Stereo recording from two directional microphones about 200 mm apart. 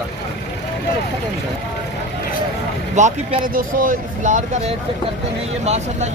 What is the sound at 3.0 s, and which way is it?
A man's voice, 35° right (ahead or behind).